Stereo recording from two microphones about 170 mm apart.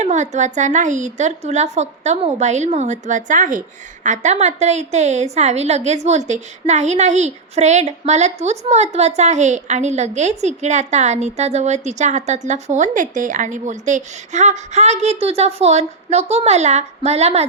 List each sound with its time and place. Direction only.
0.0 s a woman's voice: 45° right (ahead or behind)